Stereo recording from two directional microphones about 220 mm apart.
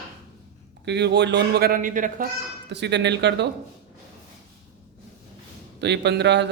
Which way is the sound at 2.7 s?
50° right (ahead or behind).